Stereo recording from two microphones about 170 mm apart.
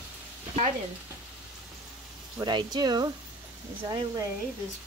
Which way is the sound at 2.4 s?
25° right (ahead or behind).